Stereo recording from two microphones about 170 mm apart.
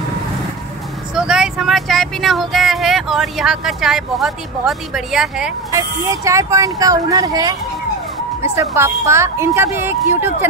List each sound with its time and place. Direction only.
1.1 s speech: 5° right (ahead or behind)
5.7 s speech: 20° right (ahead or behind)